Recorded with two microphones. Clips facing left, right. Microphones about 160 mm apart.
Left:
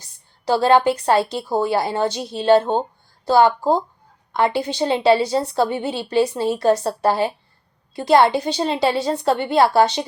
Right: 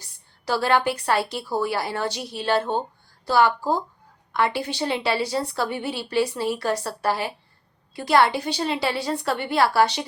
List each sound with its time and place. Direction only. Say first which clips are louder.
0.0 s a woman's voice: left 6 dB; 25° left (ahead or behind)